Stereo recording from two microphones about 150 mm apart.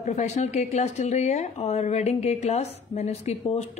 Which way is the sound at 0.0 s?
50° left (ahead or behind).